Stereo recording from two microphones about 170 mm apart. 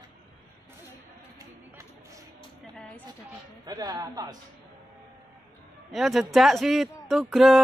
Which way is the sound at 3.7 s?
20° right (ahead or behind).